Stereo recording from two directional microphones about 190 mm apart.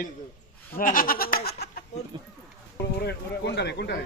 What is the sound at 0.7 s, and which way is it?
Speech, 50° left (ahead or behind).